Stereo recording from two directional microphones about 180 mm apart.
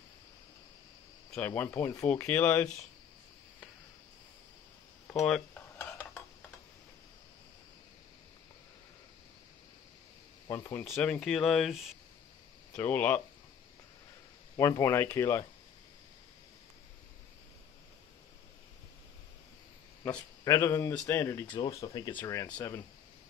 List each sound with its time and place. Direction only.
1.3 s speech: 10° left (ahead or behind)
5.2 s cutlery: 5° left (ahead or behind)
10.5 s speech: 15° left (ahead or behind)
12.7 s speech: 10° left (ahead or behind)
14.6 s speech: 20° left (ahead or behind)
20.4 s speech: 15° left (ahead or behind)